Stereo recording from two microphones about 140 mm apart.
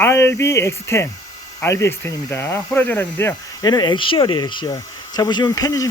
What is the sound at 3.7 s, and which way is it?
Speech, 30° left (ahead or behind).